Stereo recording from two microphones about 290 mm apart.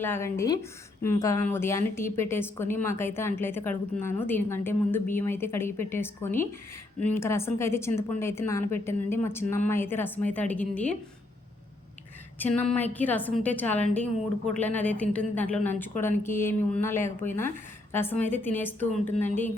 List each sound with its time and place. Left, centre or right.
0.0 s a woman's voice: centre
12.5 s a woman's voice: centre